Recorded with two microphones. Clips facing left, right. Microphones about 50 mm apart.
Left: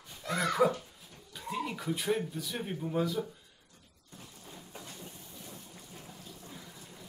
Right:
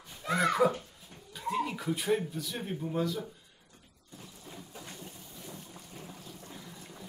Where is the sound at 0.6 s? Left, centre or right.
Centre.